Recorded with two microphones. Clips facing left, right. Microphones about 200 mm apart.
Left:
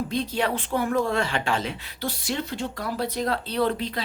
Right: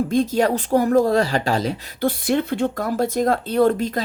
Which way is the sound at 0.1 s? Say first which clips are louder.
Right 8 dB; 45° right (ahead or behind).